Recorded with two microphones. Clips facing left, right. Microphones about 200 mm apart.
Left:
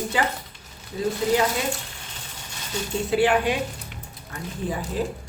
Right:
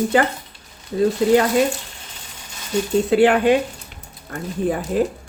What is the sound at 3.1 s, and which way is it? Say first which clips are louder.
A woman's voice: right 6 dB; 60° right (ahead or behind).